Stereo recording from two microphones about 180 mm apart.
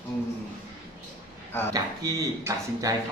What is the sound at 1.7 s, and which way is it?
Speech, 20° right (ahead or behind).